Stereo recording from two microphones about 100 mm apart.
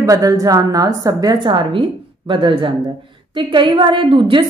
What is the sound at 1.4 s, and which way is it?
A woman's voice, 55° right (ahead or behind).